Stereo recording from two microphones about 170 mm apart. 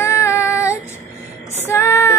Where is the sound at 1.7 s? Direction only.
15° left (ahead or behind).